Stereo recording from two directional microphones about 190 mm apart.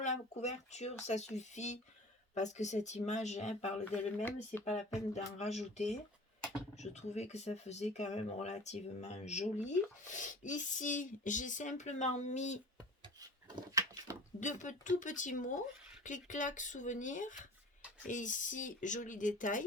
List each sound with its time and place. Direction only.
0.0 s speech: 35° left (ahead or behind)
4.2 s speech: 10° left (ahead or behind)
4.6 s speech: 35° left (ahead or behind)
12.7 s a sound: 20° right (ahead or behind)
14.4 s speech: 40° left (ahead or behind)